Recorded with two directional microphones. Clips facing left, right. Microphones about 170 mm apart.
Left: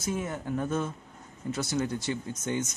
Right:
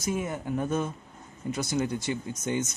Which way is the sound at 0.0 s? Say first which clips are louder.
Right 2 dB; 15° right (ahead or behind).